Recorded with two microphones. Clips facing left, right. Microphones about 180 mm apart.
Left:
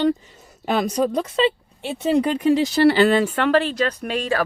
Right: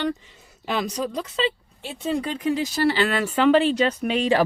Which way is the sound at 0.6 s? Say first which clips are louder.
Left 6 dB; 50° left (ahead or behind).